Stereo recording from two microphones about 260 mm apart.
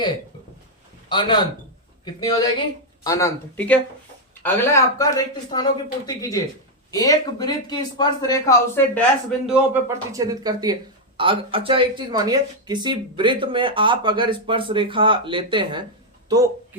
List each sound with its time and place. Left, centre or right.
1.1 s speech: centre
9.5 s speech: centre